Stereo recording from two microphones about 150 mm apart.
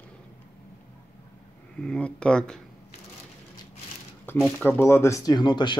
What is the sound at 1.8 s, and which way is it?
Speech, 5° left (ahead or behind).